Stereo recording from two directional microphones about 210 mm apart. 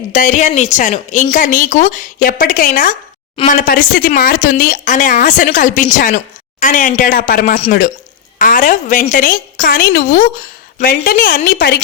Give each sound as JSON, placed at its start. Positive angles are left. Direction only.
{"t": 0.1, "sound": "speech", "side_deg": 35}